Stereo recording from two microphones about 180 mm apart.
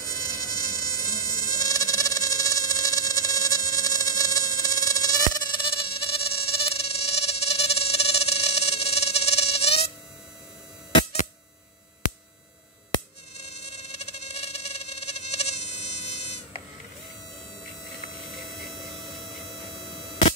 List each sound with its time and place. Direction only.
0.0 s mosquito: 20° left (ahead or behind)
13.5 s pulse: 35° left (ahead or behind)
18.8 s hum: centre (ahead or behind)